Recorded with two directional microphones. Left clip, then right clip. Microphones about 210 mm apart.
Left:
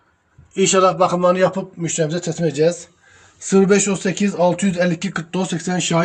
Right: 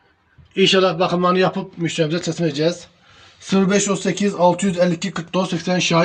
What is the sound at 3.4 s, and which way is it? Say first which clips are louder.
A man's voice: left 3 dB; 15° left (ahead or behind).